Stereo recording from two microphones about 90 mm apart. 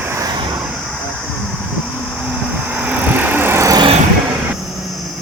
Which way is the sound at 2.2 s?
15° right (ahead or behind).